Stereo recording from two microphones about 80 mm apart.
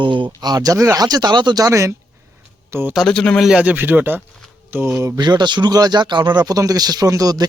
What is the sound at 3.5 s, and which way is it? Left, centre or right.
Speech, centre.